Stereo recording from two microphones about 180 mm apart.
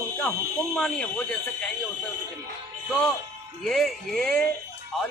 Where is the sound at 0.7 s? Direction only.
5° left (ahead or behind).